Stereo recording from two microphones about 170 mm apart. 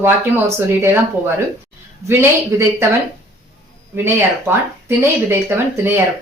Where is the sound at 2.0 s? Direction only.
15° right (ahead or behind).